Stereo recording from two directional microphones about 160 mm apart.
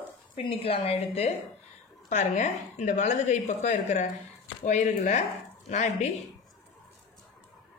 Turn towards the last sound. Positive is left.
turn(degrees=45)  # may be behind; listen again after turning